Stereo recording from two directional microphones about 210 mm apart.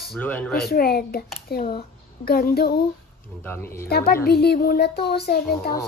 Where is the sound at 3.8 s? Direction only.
45° left (ahead or behind).